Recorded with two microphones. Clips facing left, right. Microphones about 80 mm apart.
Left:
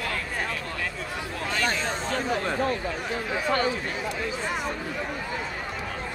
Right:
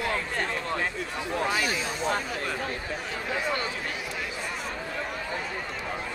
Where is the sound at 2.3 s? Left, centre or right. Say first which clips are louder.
Left 6 dB; left.